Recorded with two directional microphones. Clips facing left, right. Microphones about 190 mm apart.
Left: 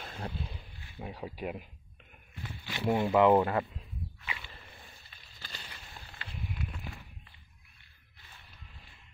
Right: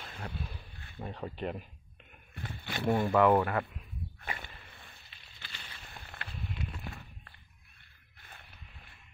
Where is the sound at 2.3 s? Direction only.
50° right (ahead or behind).